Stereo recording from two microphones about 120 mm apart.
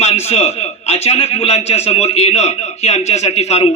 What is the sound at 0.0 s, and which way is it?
A man's voice, 60° left (ahead or behind).